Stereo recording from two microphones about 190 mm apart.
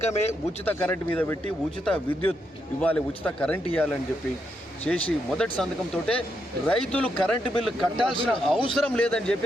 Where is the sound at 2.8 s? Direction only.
10° left (ahead or behind).